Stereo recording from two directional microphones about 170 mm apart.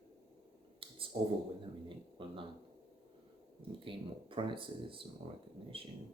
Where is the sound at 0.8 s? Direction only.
30° right (ahead or behind).